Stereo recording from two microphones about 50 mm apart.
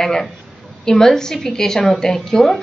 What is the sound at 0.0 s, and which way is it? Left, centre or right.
A woman's voice, centre.